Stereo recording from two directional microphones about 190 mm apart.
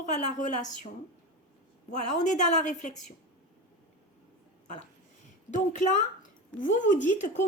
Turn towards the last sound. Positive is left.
turn(degrees=40)  # may be behind; listen again after turning